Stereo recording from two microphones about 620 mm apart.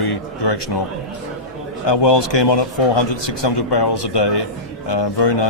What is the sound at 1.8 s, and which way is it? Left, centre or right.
A man's voice, left.